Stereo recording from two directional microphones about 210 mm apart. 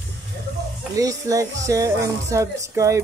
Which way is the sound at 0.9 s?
15° right (ahead or behind).